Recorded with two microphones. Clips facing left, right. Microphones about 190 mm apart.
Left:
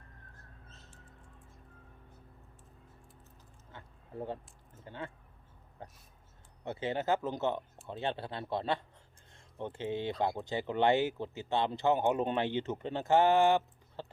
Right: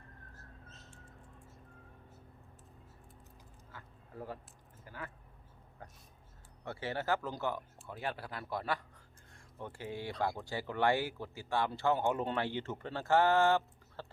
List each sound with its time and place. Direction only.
3.7 s a sound: 25° left (ahead or behind)
4.9 s speech: 25° left (ahead or behind)
5.8 s throat clearing: 25° left (ahead or behind)
6.7 s speech: 20° left (ahead or behind)